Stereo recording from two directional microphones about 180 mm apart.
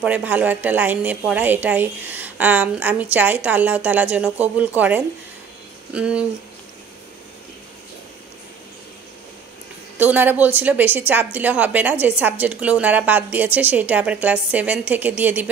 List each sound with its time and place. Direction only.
0.0 s a woman's voice: 10° right (ahead or behind)
9.9 s a woman's voice: 10° right (ahead or behind)